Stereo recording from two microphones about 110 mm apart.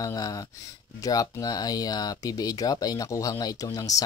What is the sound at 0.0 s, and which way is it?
Speech, 35° left (ahead or behind).